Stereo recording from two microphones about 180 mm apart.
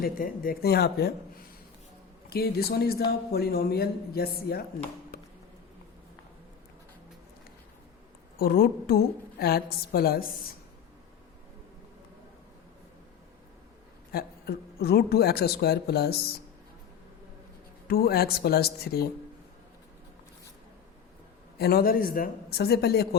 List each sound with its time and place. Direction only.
0.0 s a man's voice: 50° left (ahead or behind)
8.4 s a man's voice: 55° left (ahead or behind)
14.1 s a man's voice: 60° left (ahead or behind)
17.8 s a man's voice: 60° left (ahead or behind)
21.6 s a man's voice: 55° left (ahead or behind)